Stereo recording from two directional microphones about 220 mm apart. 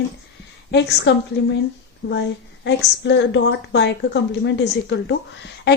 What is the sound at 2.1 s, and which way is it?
A woman's voice, 50° left (ahead or behind).